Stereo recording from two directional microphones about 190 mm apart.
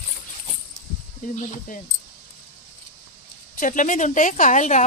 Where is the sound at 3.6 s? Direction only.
45° left (ahead or behind).